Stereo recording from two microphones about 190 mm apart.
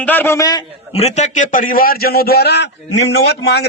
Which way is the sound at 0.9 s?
35° left (ahead or behind).